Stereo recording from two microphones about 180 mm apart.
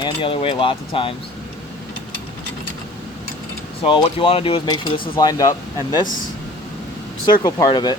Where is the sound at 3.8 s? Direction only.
30° left (ahead or behind).